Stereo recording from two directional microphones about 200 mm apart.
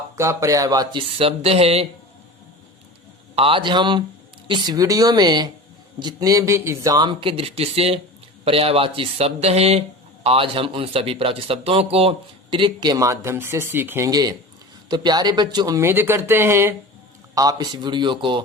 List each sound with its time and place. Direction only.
0.2 s speech: 15° right (ahead or behind); by 1.9 s 30° right (ahead or behind)
3.3 s speech: 25° right (ahead or behind)